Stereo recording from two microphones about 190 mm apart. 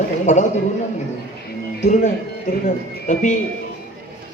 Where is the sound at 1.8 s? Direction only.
40° left (ahead or behind).